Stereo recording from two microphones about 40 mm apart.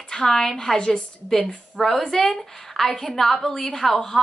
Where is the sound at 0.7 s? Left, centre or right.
Left.